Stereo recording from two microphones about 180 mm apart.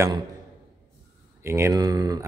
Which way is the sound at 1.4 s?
15° right (ahead or behind).